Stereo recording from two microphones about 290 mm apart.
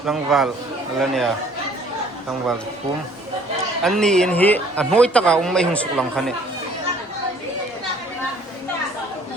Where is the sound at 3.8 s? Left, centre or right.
Centre.